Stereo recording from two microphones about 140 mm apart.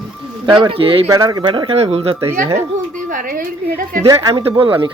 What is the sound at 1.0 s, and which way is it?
Speech, 25° right (ahead or behind).